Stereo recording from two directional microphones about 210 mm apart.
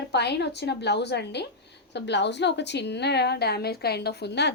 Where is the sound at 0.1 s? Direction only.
55° left (ahead or behind).